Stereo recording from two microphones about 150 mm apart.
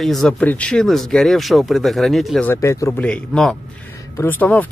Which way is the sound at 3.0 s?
5° left (ahead or behind).